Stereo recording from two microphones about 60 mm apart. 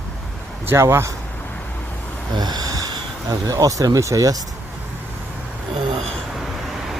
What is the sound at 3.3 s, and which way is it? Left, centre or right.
Speech, right.